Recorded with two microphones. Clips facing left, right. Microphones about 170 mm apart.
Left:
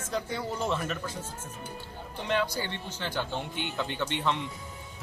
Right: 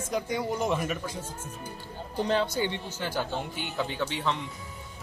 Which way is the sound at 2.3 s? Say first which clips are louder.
Right 2 dB; 25° right (ahead or behind).